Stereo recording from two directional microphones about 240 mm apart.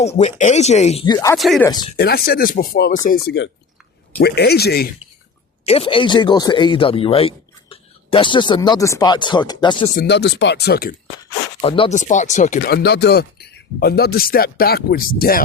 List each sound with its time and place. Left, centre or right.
0.2 s speech: left
1.4 s speech: centre
2.0 s speech: left
5.6 s speech: left
9.9 s speech: left
11.6 s speech: left